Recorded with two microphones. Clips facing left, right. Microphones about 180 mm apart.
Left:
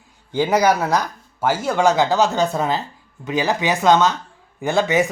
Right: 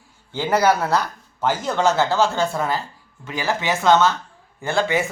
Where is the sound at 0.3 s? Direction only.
15° left (ahead or behind).